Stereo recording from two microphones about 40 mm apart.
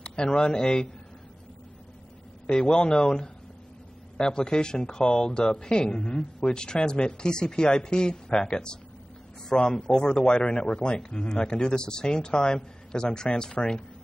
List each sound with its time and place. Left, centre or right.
0.0 s speech: left
2.4 s a man's voice: centre